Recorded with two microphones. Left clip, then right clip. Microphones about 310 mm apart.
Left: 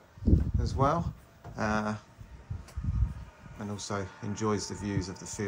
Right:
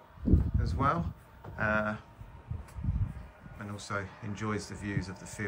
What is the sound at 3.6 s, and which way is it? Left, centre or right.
Speech, centre.